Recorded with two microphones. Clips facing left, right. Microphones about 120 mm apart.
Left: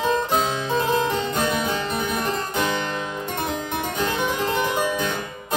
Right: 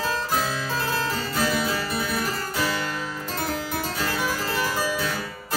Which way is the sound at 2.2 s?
20° left (ahead or behind).